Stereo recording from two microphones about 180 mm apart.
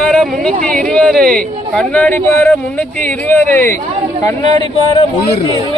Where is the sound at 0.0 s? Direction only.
5° left (ahead or behind); by 4.6 s 20° left (ahead or behind).